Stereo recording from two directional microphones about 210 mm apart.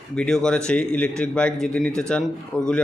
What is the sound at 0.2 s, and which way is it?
Speech, 5° left (ahead or behind).